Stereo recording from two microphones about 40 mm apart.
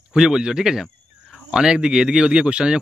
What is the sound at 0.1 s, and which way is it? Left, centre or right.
A man's voice, centre.